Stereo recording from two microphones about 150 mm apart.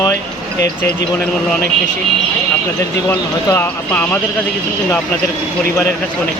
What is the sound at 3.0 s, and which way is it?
Speech, 15° left (ahead or behind).